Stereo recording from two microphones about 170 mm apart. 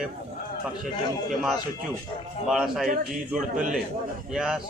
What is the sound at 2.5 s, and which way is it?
Speech, 5° right (ahead or behind).